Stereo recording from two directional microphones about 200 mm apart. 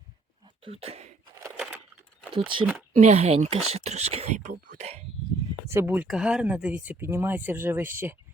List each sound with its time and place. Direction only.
0.6 s speech: 30° right (ahead or behind)
2.3 s speech: 25° right (ahead or behind)
5.6 s speech: 10° right (ahead or behind)